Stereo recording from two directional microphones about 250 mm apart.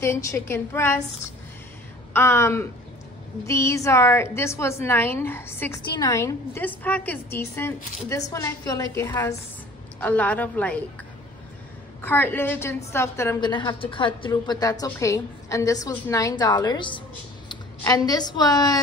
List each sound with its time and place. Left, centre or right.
0.0 s a woman's voice: centre
2.1 s a woman's voice: centre
12.0 s a woman's voice: centre